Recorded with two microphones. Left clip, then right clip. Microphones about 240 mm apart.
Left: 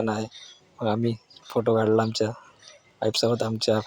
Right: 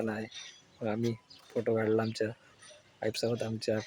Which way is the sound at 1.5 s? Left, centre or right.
Left.